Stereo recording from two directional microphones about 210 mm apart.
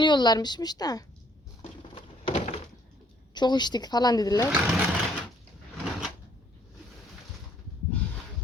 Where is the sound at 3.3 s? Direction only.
20° left (ahead or behind).